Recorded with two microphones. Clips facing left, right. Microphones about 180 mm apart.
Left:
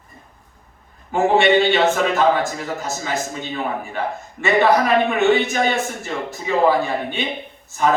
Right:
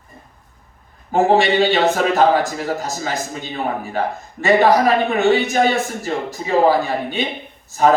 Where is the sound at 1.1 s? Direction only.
35° right (ahead or behind).